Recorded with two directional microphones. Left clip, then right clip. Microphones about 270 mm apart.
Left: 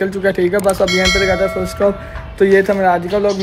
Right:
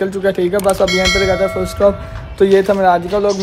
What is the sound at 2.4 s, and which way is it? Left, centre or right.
Speech, centre.